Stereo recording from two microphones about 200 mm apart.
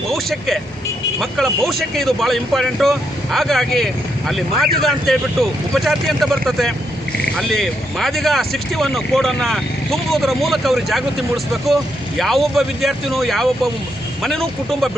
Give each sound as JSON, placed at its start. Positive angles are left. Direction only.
{"t": 0.1, "sound": "speech", "side_deg": 0}
{"t": 12.2, "sound": "speech", "side_deg": 0}